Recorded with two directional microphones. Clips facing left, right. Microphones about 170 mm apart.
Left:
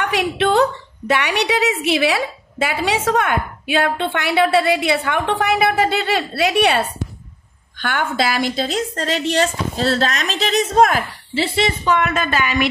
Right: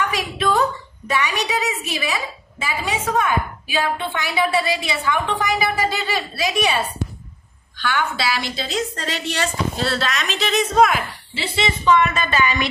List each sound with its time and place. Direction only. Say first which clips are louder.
0.0 s a woman's voice: left 4 dB; 70° left (ahead or behind)
7.8 s a woman's voice: left 2 dB; 50° left (ahead or behind)